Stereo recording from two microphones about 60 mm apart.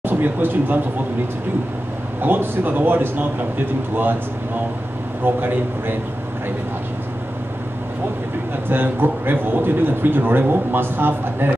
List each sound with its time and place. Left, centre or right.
0.0 s speech: right
2.2 s a man's voice: right
5.2 s a man's voice: right
8.6 s a man's voice: right